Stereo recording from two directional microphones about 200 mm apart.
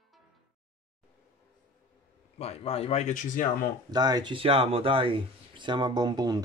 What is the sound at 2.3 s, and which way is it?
Speech, 30° left (ahead or behind).